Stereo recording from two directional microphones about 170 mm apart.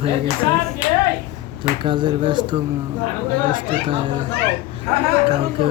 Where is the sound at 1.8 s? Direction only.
30° right (ahead or behind).